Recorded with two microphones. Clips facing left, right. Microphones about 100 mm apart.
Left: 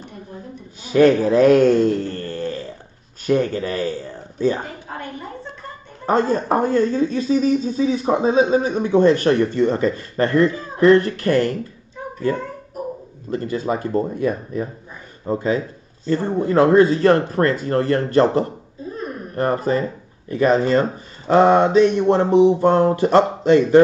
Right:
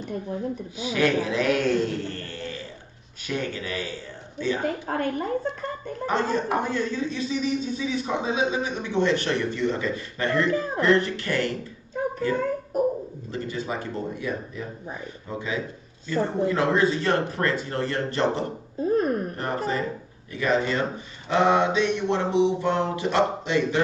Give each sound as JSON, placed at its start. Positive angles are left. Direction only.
{"t": 0.7, "sound": "speech", "side_deg": 45}
{"t": 4.8, "sound": "a woman's voice", "side_deg": -50}
{"t": 6.0, "sound": "speech", "side_deg": 40}
{"t": 13.3, "sound": "speech", "side_deg": 45}